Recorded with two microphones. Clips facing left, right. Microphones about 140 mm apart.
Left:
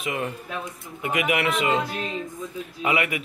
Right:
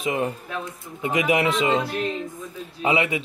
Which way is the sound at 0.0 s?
30° right (ahead or behind).